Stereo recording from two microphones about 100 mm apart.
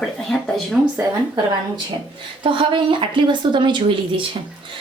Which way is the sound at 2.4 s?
60° right (ahead or behind).